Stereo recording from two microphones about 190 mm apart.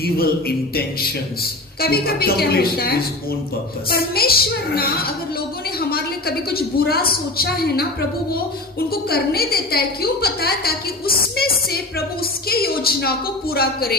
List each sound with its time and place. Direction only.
0.0 s a woman's voice: 55° left (ahead or behind)
8.9 s a woman's voice: 55° left (ahead or behind)